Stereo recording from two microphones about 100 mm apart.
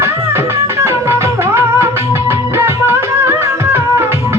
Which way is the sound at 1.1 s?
25° right (ahead or behind).